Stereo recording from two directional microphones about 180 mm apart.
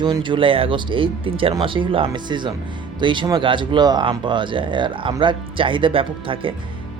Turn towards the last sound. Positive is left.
turn(degrees=-30)  # may be behind; listen again after turning